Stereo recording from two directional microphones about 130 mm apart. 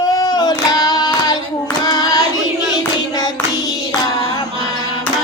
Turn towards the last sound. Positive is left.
turn(degrees=30)  # may be behind; listen again after turning